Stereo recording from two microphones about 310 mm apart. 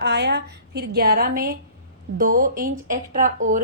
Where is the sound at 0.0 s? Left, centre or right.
Right.